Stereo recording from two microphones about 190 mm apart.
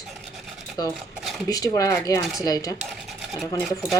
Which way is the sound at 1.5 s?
20° left (ahead or behind).